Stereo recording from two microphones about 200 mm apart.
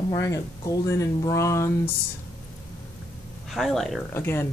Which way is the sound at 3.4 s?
Centre (ahead or behind).